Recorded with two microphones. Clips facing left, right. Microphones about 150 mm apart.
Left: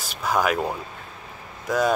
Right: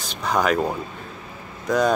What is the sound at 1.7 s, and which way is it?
Speech, 5° left (ahead or behind).